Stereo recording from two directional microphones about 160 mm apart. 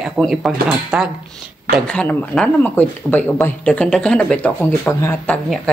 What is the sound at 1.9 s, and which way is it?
Speech, 5° left (ahead or behind).